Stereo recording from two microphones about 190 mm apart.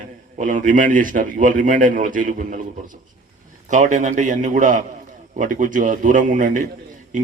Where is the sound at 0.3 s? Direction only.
40° right (ahead or behind).